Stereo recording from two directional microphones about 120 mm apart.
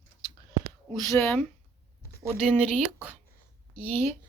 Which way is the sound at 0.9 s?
20° left (ahead or behind).